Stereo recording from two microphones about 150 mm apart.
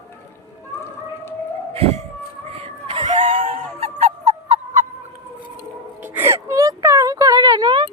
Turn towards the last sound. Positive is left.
turn(degrees=-30)  # may be behind; listen again after turning